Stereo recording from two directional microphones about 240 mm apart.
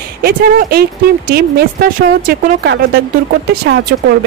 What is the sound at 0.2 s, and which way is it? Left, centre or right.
Speech, right.